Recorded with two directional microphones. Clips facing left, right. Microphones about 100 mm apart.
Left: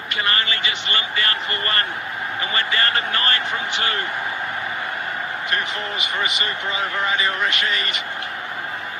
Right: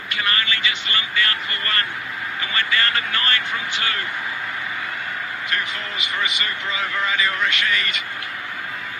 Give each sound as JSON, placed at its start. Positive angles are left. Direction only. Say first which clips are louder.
{"t": 0.2, "sound": "a man's voice", "louder": "left 1 dB", "side_deg": 35}
{"t": 6.1, "sound": "speech", "louder": "even", "side_deg": 30}